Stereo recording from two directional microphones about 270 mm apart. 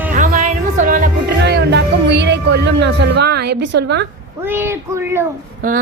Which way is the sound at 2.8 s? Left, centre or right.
Right.